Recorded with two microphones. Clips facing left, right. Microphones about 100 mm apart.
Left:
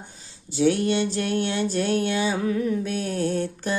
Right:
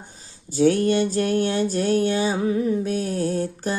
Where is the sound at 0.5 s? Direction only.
45° right (ahead or behind).